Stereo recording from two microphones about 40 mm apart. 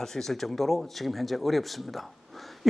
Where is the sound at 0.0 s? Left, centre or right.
Centre.